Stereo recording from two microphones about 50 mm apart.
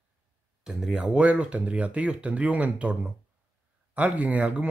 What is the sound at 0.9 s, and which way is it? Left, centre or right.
Speech, right.